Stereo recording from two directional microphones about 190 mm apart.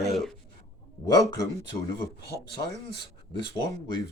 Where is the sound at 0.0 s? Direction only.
Centre (ahead or behind).